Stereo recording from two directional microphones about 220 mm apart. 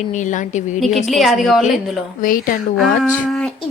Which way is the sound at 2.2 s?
40° left (ahead or behind).